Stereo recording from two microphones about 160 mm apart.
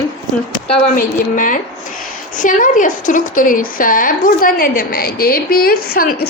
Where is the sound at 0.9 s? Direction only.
55° left (ahead or behind).